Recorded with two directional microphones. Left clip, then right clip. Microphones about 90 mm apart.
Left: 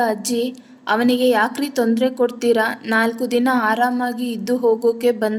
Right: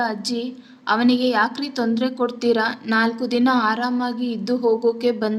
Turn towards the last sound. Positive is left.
turn(degrees=0)  # may be behind; listen again after turning